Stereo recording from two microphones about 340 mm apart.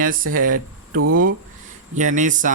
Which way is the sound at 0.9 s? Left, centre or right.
Right.